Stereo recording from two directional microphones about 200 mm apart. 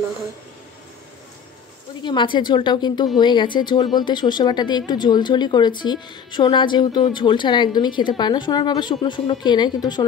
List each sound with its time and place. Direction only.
2.0 s speech: 25° left (ahead or behind)